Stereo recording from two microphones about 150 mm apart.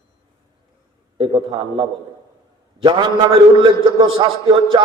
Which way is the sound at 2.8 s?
30° right (ahead or behind).